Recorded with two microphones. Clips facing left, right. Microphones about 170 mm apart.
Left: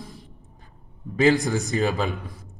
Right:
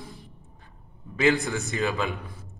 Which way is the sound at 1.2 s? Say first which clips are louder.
Left 4 dB; 35° left (ahead or behind).